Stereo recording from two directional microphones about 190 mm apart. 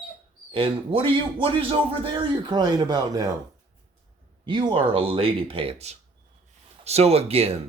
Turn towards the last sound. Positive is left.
turn(degrees=-30)  # may be behind; listen again after turning